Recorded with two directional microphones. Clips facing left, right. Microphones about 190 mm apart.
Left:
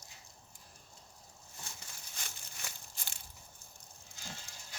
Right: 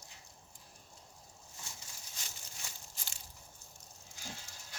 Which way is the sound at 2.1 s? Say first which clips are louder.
Left 2 dB; 55° left (ahead or behind).